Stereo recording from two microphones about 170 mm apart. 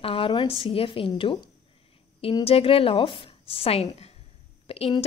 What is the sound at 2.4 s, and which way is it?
A woman's voice, 35° left (ahead or behind).